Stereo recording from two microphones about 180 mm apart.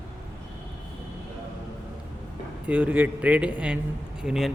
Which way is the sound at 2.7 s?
10° right (ahead or behind).